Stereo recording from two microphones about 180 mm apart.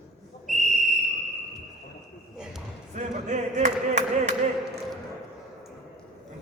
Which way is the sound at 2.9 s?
40° right (ahead or behind).